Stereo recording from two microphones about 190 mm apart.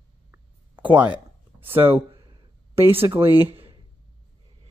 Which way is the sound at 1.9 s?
20° right (ahead or behind).